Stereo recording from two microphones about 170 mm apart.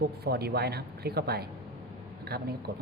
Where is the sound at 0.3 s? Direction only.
70° right (ahead or behind).